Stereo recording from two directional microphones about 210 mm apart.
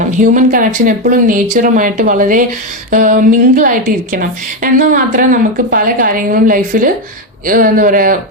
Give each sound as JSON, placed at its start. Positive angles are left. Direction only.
{"t": 0.2, "sound": "a woman's voice", "side_deg": -40}